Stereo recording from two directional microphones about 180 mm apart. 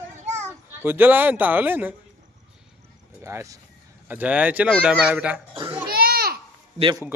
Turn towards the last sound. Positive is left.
turn(degrees=-25)  # may be behind; listen again after turning